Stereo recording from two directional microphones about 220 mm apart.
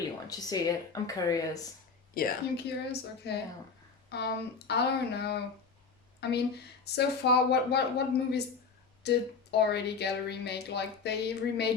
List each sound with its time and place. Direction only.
0.3 s speech: 15° left (ahead or behind)
2.1 s speech: 45° left (ahead or behind)